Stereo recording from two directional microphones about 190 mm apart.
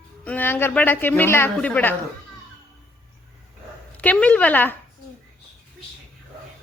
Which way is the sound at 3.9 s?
5° left (ahead or behind).